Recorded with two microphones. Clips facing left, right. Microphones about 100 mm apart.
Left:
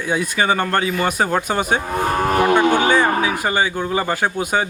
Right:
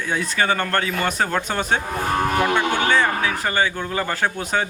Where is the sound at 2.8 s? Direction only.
15° left (ahead or behind).